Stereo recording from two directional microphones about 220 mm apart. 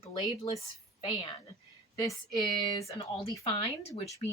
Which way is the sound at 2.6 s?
20° left (ahead or behind).